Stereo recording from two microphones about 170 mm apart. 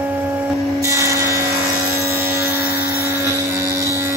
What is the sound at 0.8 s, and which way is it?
Wood, 15° right (ahead or behind).